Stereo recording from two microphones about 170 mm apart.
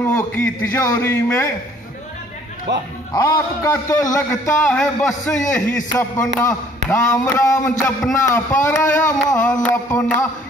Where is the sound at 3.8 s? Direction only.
15° left (ahead or behind).